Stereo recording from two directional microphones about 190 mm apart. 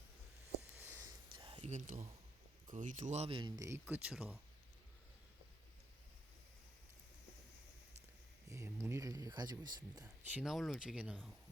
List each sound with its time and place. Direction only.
0.7 s a sound: 10° right (ahead or behind); by 1.7 s 25° right (ahead or behind)
1.7 s speech: 35° right (ahead or behind); by 4.4 s 5° right (ahead or behind)
8.4 s speech: 15° right (ahead or behind)
10.2 s speech: 5° right (ahead or behind)